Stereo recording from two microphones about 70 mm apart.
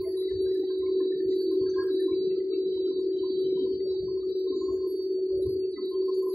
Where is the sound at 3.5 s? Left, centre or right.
Left.